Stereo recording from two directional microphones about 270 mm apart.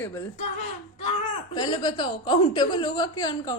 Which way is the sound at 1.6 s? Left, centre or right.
Centre.